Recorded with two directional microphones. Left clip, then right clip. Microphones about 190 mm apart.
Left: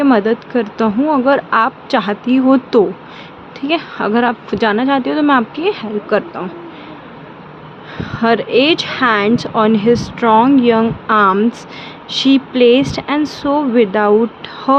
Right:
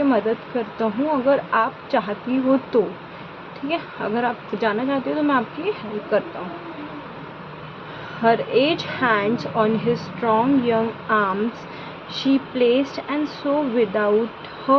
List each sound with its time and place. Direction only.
0.1 s speech: 60° left (ahead or behind)
8.2 s speech: 60° left (ahead or behind)